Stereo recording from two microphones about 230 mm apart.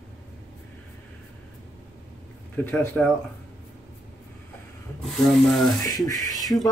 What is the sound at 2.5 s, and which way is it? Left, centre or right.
Speech, centre.